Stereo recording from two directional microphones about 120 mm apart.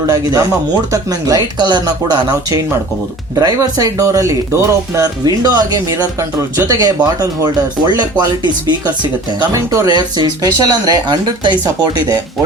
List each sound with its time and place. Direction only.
0.1 s speech: 30° right (ahead or behind)
9.5 s speech: 25° right (ahead or behind)
9.9 s speech: 35° right (ahead or behind)